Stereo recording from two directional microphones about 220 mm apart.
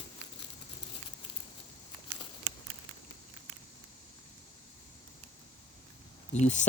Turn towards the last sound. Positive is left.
turn(degrees=30)  # may be behind; listen again after turning